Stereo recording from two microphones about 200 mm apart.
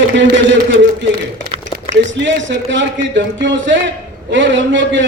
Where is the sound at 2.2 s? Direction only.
65° right (ahead or behind).